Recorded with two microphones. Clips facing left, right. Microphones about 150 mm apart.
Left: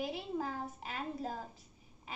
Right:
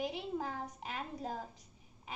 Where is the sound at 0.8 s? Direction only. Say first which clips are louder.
Left 2 dB; 15° right (ahead or behind).